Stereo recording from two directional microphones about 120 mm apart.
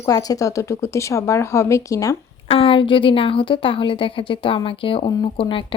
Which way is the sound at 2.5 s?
50° left (ahead or behind).